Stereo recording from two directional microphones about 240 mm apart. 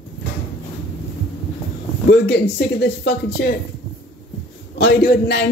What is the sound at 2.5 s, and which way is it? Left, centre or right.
Speech, left.